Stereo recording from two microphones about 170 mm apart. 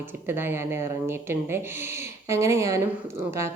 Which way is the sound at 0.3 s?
15° right (ahead or behind).